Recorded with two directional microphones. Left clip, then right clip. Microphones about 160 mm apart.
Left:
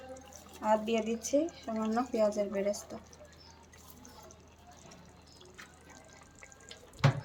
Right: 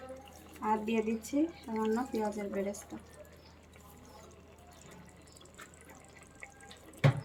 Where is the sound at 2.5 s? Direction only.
70° left (ahead or behind).